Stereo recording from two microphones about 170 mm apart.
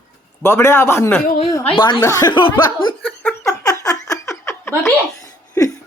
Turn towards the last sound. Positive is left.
turn(degrees=20)  # may be behind; listen again after turning